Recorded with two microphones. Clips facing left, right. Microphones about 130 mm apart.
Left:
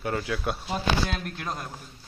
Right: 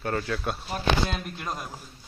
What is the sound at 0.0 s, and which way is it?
Speech, 10° left (ahead or behind).